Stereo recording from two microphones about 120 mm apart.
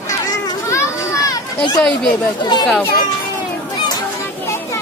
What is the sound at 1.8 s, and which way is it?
Speech, 5° left (ahead or behind).